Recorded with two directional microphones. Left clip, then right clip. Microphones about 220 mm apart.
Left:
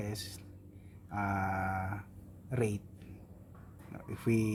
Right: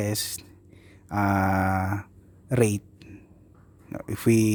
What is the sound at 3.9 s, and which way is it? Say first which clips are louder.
Speech: right 11 dB; 50° right (ahead or behind).